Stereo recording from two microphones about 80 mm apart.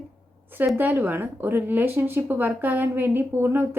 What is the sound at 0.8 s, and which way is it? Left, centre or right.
Speech, right.